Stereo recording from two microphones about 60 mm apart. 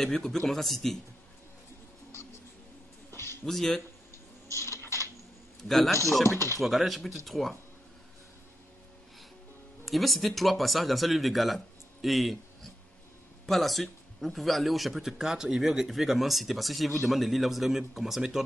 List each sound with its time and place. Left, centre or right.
0.0 s speech: centre
3.1 s a sound: left
3.4 s speech: centre
4.5 s typing: left
5.6 s speech: centre
9.8 s speech: centre
13.5 s speech: centre